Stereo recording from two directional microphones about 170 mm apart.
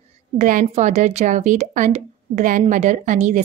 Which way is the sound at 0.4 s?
50° right (ahead or behind).